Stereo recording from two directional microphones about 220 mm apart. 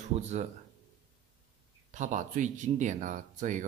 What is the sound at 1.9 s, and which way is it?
Speech, 35° right (ahead or behind).